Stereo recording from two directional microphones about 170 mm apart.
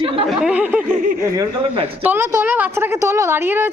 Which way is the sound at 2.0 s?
10° right (ahead or behind).